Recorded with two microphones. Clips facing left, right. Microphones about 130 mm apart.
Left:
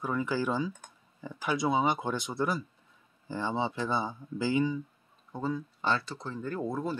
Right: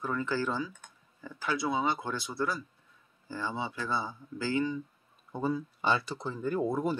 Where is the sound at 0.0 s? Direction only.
10° left (ahead or behind).